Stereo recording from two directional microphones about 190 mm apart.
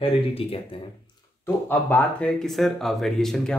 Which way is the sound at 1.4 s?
10° left (ahead or behind).